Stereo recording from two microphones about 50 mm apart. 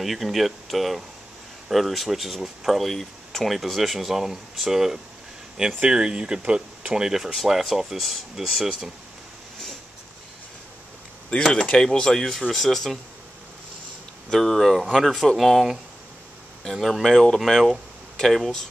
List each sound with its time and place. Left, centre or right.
0.0 s speech: centre; by 7.1 s right
7.3 s speech: centre
11.2 s speech: centre
14.3 s speech: centre
16.8 s speech: centre